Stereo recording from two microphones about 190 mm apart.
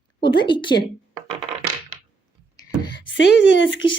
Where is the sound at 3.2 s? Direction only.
75° left (ahead or behind).